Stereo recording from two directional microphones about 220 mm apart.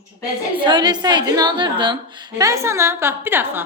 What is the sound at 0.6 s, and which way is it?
A woman's voice, 20° right (ahead or behind).